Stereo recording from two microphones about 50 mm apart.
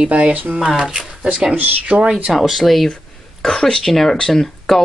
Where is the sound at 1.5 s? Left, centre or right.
Right.